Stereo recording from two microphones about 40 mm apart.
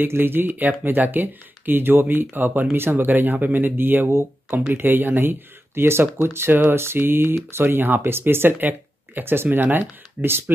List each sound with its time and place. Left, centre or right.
0.1 s speech: right
4.8 s speech: right
5.8 s speech: right
8.5 s a sound: right
9.2 s speech: right